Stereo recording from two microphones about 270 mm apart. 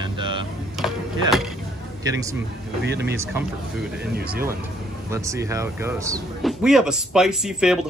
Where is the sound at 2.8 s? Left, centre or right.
Right.